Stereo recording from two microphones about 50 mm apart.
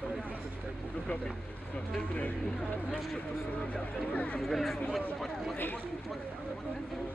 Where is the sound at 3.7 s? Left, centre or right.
Left.